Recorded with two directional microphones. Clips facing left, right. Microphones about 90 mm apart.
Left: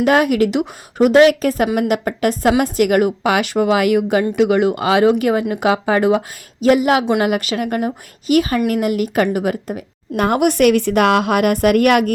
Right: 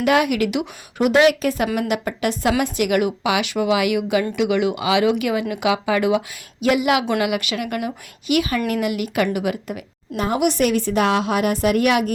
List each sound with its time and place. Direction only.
0.0 s a woman's voice: 40° left (ahead or behind)
10.2 s a woman's voice: 60° left (ahead or behind)